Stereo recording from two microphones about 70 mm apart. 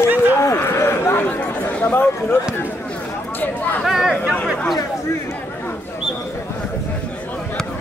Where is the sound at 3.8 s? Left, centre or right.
Centre.